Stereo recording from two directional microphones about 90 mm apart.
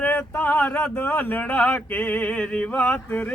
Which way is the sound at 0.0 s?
20° left (ahead or behind).